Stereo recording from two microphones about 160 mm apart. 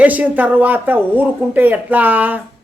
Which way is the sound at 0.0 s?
10° right (ahead or behind).